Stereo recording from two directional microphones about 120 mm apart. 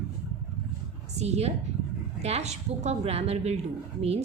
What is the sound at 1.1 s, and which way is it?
A woman's voice, 65° right (ahead or behind).